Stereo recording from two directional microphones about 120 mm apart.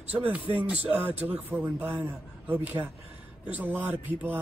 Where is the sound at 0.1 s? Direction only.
15° right (ahead or behind).